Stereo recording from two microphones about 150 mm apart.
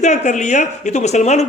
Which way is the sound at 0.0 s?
50° left (ahead or behind).